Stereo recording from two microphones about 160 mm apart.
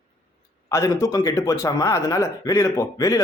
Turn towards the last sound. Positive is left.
turn(degrees=20)  # may be behind; listen again after turning